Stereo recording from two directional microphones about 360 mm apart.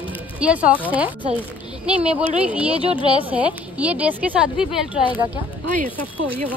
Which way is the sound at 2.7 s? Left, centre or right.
Centre.